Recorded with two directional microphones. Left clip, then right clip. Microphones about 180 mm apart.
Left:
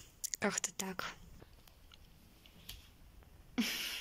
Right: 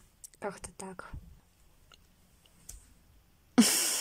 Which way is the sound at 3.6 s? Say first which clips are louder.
Right 12 dB; 50° right (ahead or behind).